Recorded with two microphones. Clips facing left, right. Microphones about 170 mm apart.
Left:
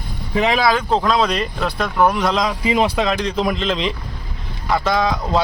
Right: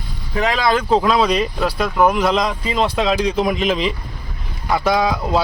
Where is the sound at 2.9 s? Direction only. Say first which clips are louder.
Right 2 dB; centre (ahead or behind).